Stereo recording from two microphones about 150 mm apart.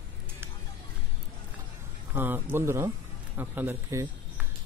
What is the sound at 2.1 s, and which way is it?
Speech, 15° right (ahead or behind).